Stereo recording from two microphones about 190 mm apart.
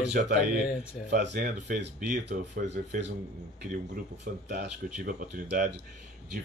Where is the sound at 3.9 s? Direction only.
60° right (ahead or behind).